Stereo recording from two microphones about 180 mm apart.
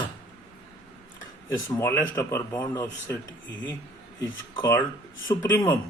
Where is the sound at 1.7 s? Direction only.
15° left (ahead or behind).